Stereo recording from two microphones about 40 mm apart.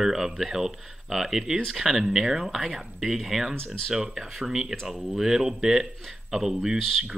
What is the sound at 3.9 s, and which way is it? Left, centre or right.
Speech, centre.